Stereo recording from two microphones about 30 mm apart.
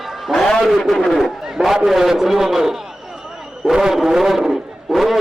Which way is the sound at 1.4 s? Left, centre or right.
Centre.